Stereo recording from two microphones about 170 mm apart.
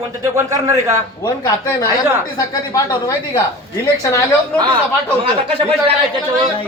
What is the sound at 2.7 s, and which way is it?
A woman's voice, 20° left (ahead or behind).